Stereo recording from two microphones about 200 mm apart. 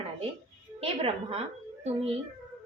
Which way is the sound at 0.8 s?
30° right (ahead or behind).